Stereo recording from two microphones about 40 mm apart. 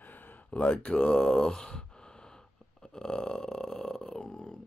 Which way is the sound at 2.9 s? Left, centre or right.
Centre.